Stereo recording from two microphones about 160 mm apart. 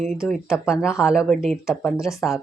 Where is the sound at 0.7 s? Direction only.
15° left (ahead or behind).